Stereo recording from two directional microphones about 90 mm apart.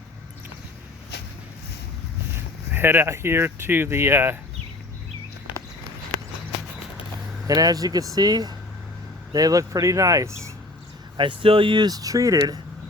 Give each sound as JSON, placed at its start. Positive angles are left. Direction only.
{"t": 2.3, "sound": "speech", "side_deg": -25}
{"t": 7.4, "sound": "speech", "side_deg": -40}
{"t": 11.2, "sound": "speech", "side_deg": -75}
{"t": 11.9, "sound": "speech", "side_deg": -45}